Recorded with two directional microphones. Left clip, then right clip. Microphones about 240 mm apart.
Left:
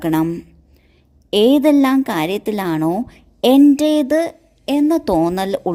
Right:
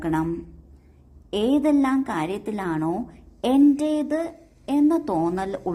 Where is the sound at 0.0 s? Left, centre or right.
Left.